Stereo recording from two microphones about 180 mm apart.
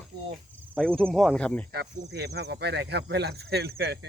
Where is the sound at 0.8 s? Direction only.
5° left (ahead or behind).